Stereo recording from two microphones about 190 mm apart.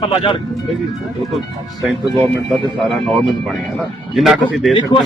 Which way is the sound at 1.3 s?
Centre (ahead or behind).